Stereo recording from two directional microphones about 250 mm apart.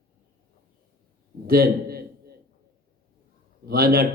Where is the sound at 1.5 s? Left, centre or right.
Right.